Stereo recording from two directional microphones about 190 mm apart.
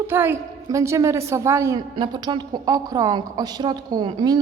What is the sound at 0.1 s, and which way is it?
A woman's voice, 10° right (ahead or behind).